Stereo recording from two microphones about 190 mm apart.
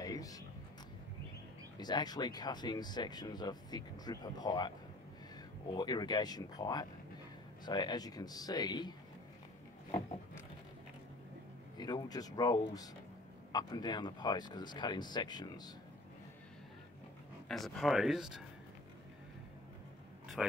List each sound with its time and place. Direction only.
0.0 s a sound: 20° left (ahead or behind)
1.8 s speech: 20° left (ahead or behind)
11.8 s speech: 20° left (ahead or behind)
17.5 s speech: centre (ahead or behind)
20.4 s speech: centre (ahead or behind)